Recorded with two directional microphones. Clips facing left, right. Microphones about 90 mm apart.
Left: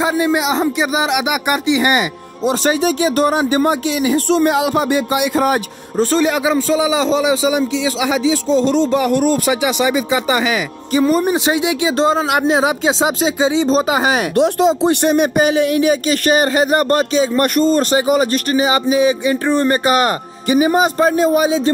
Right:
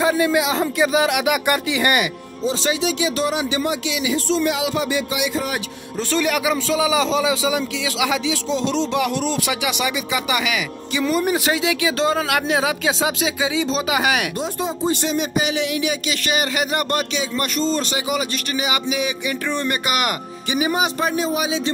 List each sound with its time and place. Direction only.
0.0 s speech: 20° left (ahead or behind)
2.4 s speech: 55° left (ahead or behind); by 6.2 s 40° left (ahead or behind)
6.2 s speech: 25° left (ahead or behind); by 9.4 s 50° left (ahead or behind)
9.5 s speech: 30° left (ahead or behind)
11.2 s speech: 25° left (ahead or behind)
14.3 s speech: 70° left (ahead or behind); by 21.7 s 40° left (ahead or behind)